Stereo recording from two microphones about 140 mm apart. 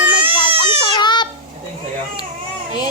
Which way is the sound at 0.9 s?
35° left (ahead or behind).